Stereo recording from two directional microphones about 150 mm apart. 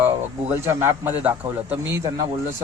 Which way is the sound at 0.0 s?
15° right (ahead or behind).